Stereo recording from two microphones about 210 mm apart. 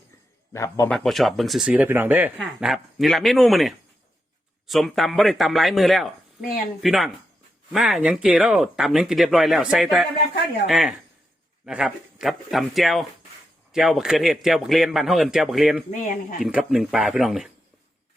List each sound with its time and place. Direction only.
0.5 s a man's voice: 15° left (ahead or behind)
0.9 s speech: centre (ahead or behind)
15.9 s speech: 40° left (ahead or behind)
16.4 s speech: 5° right (ahead or behind)